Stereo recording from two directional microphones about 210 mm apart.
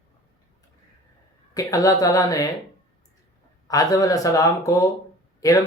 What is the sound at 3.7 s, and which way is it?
Speech, 15° left (ahead or behind).